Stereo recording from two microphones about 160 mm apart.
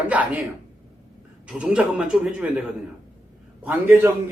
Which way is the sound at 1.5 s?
5° right (ahead or behind).